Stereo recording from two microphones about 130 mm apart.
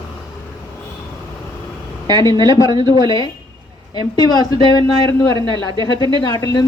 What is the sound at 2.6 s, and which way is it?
Speech, 35° right (ahead or behind).